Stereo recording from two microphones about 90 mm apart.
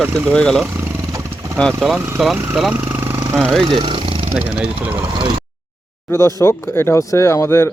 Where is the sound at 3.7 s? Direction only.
60° right (ahead or behind); by 4.3 s 80° right.